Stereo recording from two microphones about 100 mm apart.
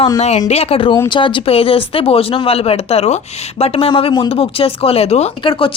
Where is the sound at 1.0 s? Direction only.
55° left (ahead or behind).